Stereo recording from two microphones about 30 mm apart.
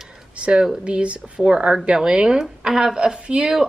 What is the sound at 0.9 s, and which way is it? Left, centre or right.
A woman's voice, right.